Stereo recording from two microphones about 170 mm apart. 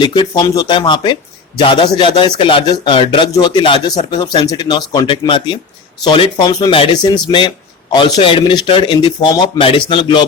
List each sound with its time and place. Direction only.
0.0 s speech: 25° left (ahead or behind)